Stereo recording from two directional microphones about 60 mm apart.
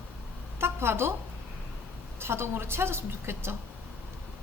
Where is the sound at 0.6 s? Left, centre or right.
Right.